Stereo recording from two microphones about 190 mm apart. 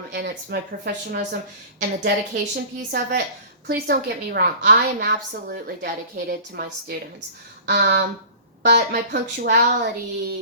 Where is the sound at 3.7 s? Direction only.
55° right (ahead or behind).